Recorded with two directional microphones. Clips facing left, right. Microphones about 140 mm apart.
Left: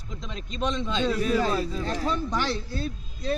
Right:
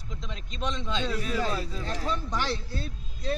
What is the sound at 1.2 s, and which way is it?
A man's voice, 70° left (ahead or behind).